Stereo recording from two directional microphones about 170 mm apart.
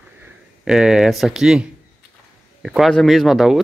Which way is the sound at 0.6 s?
5° right (ahead or behind).